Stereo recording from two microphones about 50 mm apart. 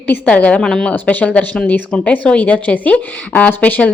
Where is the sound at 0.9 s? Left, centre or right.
Left.